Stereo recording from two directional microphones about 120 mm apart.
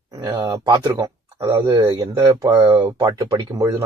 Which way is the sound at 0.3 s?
30° right (ahead or behind).